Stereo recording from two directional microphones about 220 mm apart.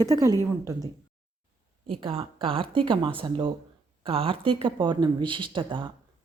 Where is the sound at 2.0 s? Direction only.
25° right (ahead or behind).